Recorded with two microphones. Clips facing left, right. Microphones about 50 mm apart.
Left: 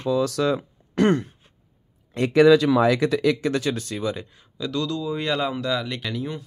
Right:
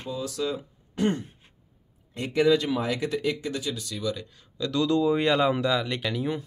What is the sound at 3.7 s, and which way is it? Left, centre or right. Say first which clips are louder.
Speech: left 4 dB; left.